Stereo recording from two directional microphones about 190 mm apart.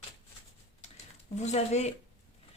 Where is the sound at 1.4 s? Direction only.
35° left (ahead or behind).